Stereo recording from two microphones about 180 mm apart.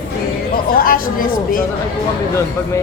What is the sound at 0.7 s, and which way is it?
Speech, 50° left (ahead or behind).